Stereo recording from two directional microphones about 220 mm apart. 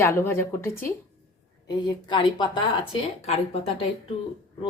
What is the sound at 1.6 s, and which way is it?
Speech, 20° left (ahead or behind).